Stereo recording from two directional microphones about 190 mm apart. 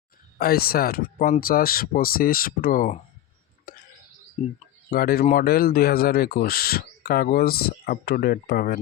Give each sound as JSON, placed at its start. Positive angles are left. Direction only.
{"t": 0.3, "sound": "speech", "side_deg": 55}
{"t": 3.7, "sound": "whispering", "side_deg": 50}
{"t": 4.9, "sound": "speech", "side_deg": 50}